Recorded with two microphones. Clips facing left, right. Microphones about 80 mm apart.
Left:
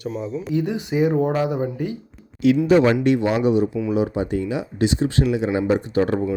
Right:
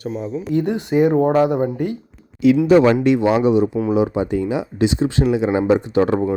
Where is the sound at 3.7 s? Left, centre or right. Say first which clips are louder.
Right 4 dB; right.